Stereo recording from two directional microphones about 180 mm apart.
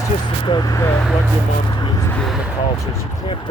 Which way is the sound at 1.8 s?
20° left (ahead or behind).